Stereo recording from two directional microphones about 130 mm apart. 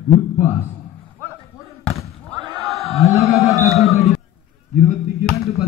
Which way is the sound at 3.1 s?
Centre (ahead or behind).